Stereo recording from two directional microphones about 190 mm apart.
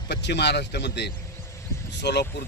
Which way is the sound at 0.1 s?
65° left (ahead or behind).